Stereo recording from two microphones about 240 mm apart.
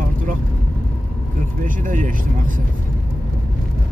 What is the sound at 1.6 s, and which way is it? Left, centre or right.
Speech, right.